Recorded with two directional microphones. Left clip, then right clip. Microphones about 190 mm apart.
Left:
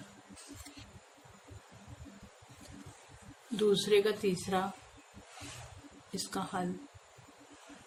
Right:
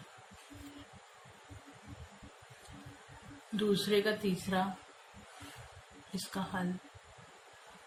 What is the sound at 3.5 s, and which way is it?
Speech, 30° left (ahead or behind).